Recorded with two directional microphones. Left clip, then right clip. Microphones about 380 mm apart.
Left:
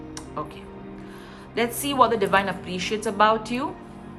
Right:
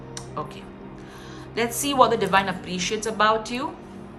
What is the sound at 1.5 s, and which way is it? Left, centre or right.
A woman's voice, centre.